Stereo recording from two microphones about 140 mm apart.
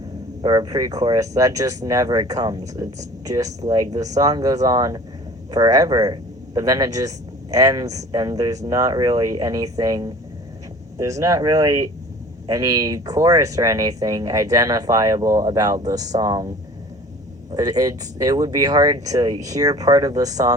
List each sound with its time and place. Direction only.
0.4 s speech: 30° right (ahead or behind)
17.5 s speech: 25° right (ahead or behind)